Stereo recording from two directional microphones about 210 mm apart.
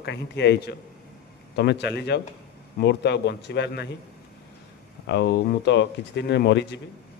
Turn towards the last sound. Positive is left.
turn(degrees=55)  # may be behind; listen again after turning